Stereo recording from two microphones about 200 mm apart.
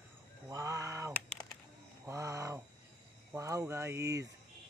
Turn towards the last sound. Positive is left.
turn(degrees=-15)  # may be behind; listen again after turning